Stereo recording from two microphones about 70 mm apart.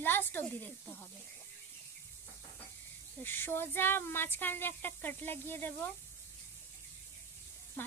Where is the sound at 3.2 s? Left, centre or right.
Left.